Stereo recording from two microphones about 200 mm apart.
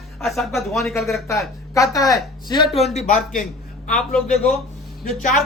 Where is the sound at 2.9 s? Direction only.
40° left (ahead or behind).